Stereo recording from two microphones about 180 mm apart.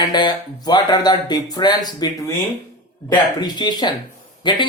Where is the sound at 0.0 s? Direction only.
25° left (ahead or behind).